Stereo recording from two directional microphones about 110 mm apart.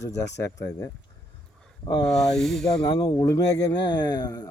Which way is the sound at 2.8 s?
40° left (ahead or behind).